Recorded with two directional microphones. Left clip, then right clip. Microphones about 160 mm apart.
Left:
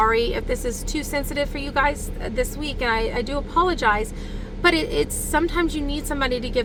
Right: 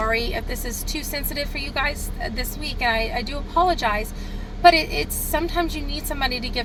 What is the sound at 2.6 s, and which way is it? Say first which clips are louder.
A woman's voice: right 4 dB; 10° left (ahead or behind).